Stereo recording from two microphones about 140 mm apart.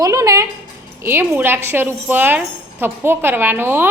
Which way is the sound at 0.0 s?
25° right (ahead or behind).